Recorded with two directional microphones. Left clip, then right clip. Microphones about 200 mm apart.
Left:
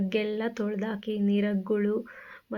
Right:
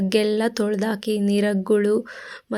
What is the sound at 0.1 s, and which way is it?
Speech, 55° right (ahead or behind).